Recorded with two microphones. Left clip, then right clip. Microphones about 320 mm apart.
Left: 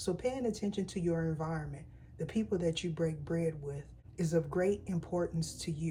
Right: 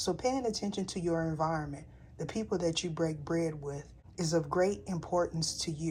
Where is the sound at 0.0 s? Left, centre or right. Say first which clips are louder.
Right 3 dB; centre.